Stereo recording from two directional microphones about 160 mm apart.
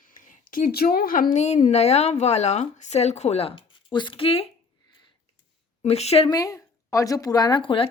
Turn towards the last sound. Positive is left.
turn(degrees=35)  # may be behind; listen again after turning